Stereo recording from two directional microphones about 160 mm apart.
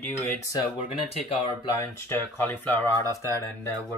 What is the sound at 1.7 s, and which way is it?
Speech, 15° left (ahead or behind).